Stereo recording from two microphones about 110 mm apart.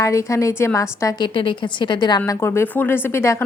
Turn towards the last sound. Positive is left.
turn(degrees=25)  # may be behind; listen again after turning